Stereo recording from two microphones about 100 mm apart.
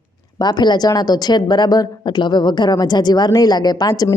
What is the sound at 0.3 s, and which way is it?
A woman's voice, 45° left (ahead or behind).